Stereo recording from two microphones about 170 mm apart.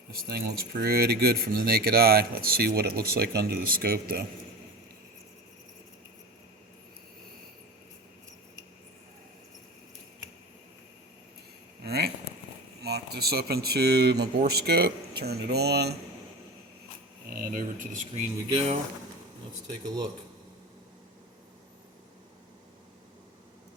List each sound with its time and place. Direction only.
0.8 s speech: 65° right (ahead or behind)
11.8 s a sound: 70° right (ahead or behind)
12.8 s speech: 70° right (ahead or behind)
17.2 s speech: 60° right (ahead or behind); by 18.8 s 35° right (ahead or behind)